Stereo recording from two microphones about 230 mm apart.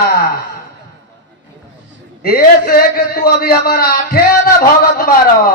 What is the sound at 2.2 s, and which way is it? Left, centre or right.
A man's voice, left.